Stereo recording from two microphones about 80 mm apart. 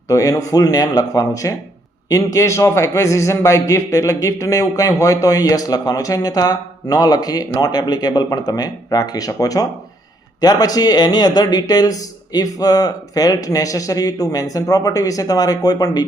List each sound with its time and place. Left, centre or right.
0.1 s a man's voice: left